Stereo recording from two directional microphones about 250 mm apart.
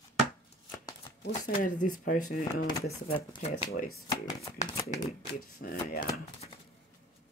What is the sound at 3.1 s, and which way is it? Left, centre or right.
Speech, left.